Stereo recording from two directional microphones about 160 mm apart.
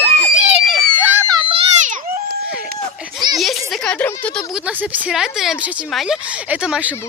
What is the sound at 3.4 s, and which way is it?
Speech, centre (ahead or behind).